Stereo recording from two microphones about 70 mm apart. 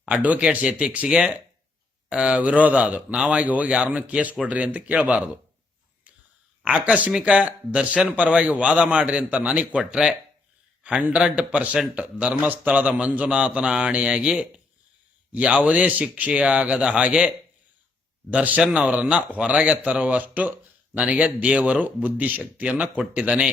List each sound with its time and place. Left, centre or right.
0.0 s a man's voice: centre
6.7 s a man's voice: right